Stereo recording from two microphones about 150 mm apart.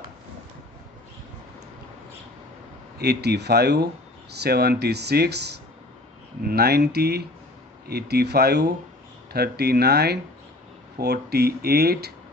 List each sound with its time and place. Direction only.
3.0 s speech: 90° right
6.4 s speech: 90° right